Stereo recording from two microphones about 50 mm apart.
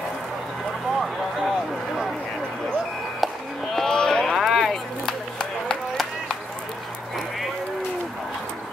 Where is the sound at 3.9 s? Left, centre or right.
Centre.